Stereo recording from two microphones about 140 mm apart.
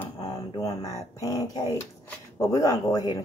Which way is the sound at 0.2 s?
25° left (ahead or behind).